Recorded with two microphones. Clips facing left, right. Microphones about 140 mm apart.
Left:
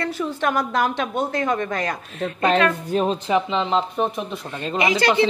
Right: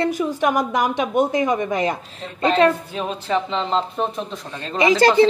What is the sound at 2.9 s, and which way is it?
Speech, 45° left (ahead or behind).